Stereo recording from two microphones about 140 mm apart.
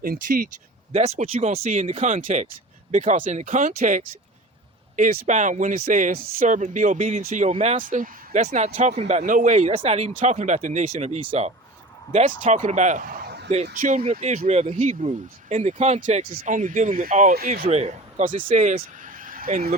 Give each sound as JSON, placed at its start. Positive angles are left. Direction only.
{"t": 0.0, "sound": "speech", "side_deg": -85}
{"t": 0.9, "sound": "speech", "side_deg": -50}
{"t": 7.8, "sound": "speech", "side_deg": -75}
{"t": 13.5, "sound": "speech", "side_deg": -60}